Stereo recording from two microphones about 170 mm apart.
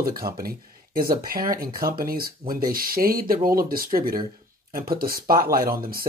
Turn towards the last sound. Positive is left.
turn(degrees=-60)  # may be behind; listen again after turning